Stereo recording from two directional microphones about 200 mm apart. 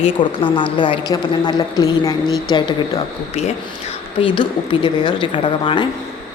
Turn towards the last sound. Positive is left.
turn(degrees=25)  # may be behind; listen again after turning